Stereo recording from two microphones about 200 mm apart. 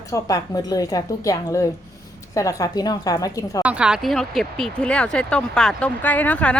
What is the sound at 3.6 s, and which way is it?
Speech, 5° right (ahead or behind).